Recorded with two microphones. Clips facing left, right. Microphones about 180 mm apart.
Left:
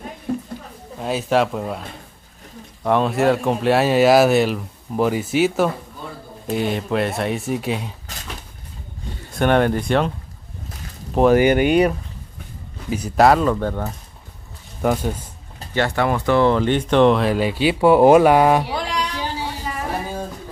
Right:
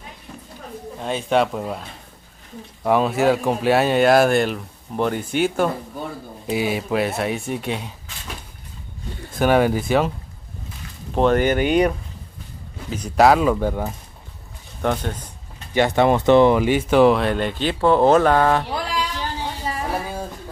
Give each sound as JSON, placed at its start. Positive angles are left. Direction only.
{"t": 0.3, "sound": "a sound", "side_deg": 55}
{"t": 0.9, "sound": "speech", "side_deg": 5}
{"t": 9.3, "sound": "speech", "side_deg": -5}
{"t": 11.1, "sound": "speech", "side_deg": 5}
{"t": 12.9, "sound": "speech", "side_deg": 5}
{"t": 14.8, "sound": "speech", "side_deg": 5}
{"t": 15.7, "sound": "speech", "side_deg": -15}
{"t": 18.7, "sound": "a sound", "side_deg": -5}